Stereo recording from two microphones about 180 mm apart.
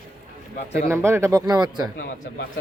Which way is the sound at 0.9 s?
15° right (ahead or behind).